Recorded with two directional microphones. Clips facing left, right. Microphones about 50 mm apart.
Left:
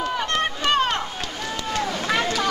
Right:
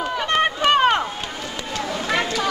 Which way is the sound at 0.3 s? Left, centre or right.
Centre.